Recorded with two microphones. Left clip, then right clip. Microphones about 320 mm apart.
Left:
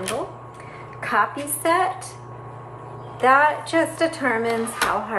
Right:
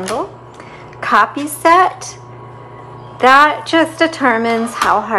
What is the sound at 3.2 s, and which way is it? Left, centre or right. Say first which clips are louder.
A woman's voice: right 8 dB; right.